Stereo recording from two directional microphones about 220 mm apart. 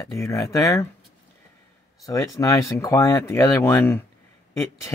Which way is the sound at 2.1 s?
15° left (ahead or behind).